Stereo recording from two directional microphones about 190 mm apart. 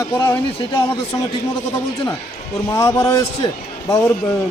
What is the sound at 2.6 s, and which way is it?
Speech, 15° left (ahead or behind).